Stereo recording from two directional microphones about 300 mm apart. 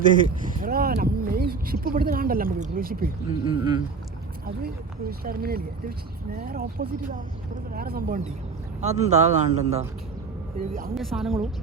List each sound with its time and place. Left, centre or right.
0.6 s speech: right
3.2 s speech: centre
4.4 s speech: right
10.9 s a woman's voice: centre